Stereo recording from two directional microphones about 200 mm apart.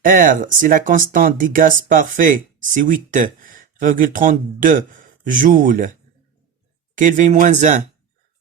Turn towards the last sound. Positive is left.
turn(degrees=-35)  # may be behind; listen again after turning